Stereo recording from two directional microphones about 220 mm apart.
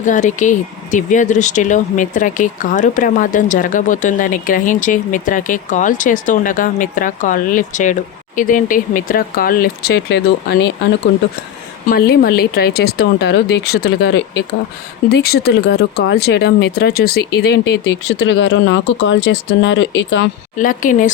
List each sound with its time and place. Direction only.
0.0 s speech: 35° left (ahead or behind); by 10.7 s 50° left (ahead or behind)
11.9 s speech: 45° left (ahead or behind)
18.2 s speech: 60° left (ahead or behind)
20.6 s speech: 35° left (ahead or behind)